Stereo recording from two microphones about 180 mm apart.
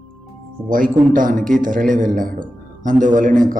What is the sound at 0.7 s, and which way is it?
A man's voice, 50° right (ahead or behind).